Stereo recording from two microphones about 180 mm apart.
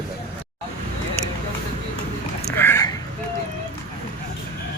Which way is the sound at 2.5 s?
10° left (ahead or behind).